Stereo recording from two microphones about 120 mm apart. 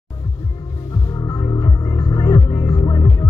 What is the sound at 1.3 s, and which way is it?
Music, 40° left (ahead or behind).